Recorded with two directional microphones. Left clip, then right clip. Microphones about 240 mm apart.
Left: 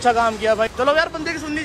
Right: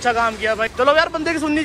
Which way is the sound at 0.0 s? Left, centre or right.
Centre.